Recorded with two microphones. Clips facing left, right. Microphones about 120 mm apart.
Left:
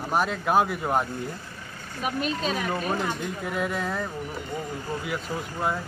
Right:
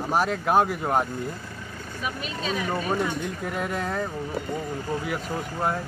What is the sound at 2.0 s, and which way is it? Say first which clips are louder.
Speech: left 5 dB; 45° left (ahead or behind).